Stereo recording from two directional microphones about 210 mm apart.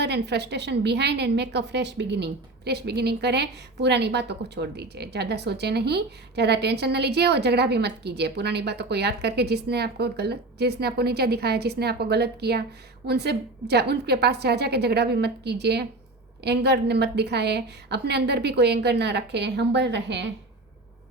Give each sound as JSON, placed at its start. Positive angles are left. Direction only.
{"t": 0.0, "sound": "a woman's voice", "side_deg": -55}